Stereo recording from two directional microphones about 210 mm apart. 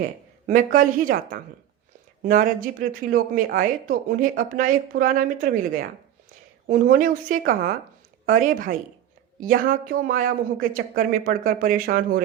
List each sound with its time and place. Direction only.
0.0 s speech: 40° right (ahead or behind)